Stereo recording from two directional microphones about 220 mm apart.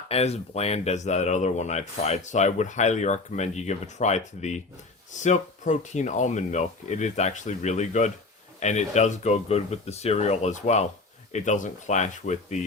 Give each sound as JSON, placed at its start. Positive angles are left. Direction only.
{"t": 0.1, "sound": "speech", "side_deg": 30}